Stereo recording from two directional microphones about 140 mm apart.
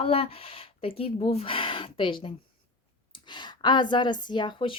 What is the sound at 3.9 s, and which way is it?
Speech, 35° left (ahead or behind).